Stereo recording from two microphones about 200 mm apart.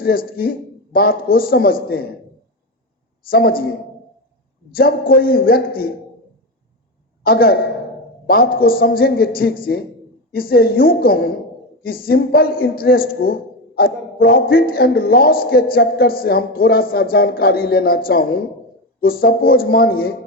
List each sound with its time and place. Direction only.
0.0 s a man's voice: 50° left (ahead or behind)
3.2 s a man's voice: 50° left (ahead or behind)
4.7 s a man's voice: 50° left (ahead or behind)
7.3 s a man's voice: 50° left (ahead or behind)